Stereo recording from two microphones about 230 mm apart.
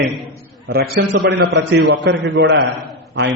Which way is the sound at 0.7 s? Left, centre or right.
Right.